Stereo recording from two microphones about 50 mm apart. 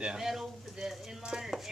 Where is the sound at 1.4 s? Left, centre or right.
Centre.